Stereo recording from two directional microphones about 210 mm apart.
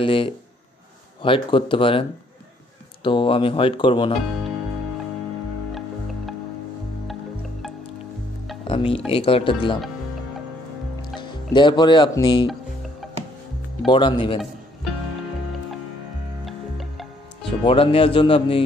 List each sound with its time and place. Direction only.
0.0 s speech: 25° left (ahead or behind)
5.7 s music: centre (ahead or behind)
8.6 s music: 25° left (ahead or behind)
9.1 s speech: 25° left (ahead or behind)
11.1 s speech: 20° left (ahead or behind)
13.0 s music: centre (ahead or behind)
13.8 s speech: 20° left (ahead or behind)
16.4 s music: centre (ahead or behind)
17.4 s speech: 25° left (ahead or behind)